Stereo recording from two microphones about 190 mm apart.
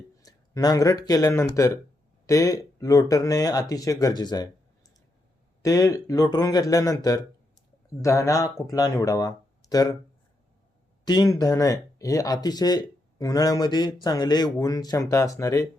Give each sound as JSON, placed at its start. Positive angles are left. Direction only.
{"t": 0.2, "sound": "speech", "side_deg": 20}
{"t": 5.6, "sound": "speech", "side_deg": 20}
{"t": 11.0, "sound": "speech", "side_deg": 20}